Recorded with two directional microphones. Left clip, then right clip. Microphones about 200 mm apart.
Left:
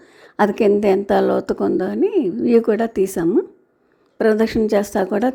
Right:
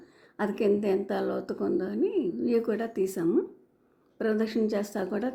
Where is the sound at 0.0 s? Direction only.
40° left (ahead or behind).